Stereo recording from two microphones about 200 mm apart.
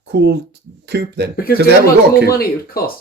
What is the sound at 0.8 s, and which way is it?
Speech, 55° right (ahead or behind).